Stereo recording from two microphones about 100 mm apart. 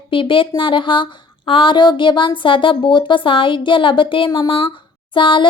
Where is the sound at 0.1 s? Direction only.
60° left (ahead or behind).